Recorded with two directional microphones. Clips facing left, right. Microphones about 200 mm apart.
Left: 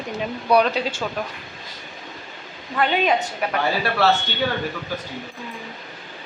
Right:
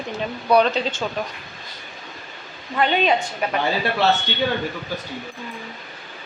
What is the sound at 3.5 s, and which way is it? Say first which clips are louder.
Speech: even; 20° right (ahead or behind).